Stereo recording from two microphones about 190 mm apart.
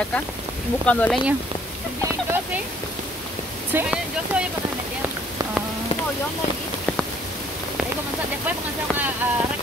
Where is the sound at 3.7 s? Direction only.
10° right (ahead or behind).